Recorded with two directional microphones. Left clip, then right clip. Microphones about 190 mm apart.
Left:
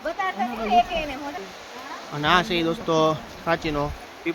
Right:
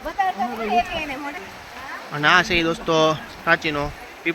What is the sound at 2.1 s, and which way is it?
Speech, centre (ahead or behind).